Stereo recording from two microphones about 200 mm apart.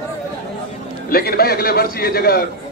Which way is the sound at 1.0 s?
50° left (ahead or behind).